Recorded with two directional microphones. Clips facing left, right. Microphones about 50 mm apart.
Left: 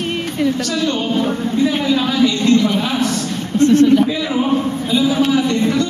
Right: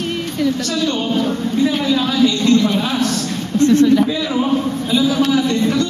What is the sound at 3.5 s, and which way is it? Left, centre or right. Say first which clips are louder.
Speech: left 1 dB; left.